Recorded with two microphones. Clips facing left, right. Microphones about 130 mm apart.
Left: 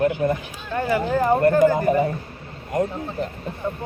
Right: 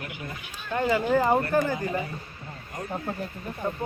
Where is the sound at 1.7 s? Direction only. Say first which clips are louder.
Left 10 dB; 55° left (ahead or behind).